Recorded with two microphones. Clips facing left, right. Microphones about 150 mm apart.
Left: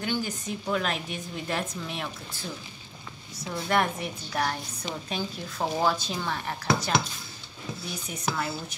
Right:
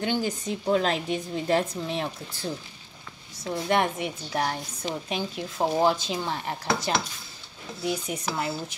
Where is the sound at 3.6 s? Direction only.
20° right (ahead or behind).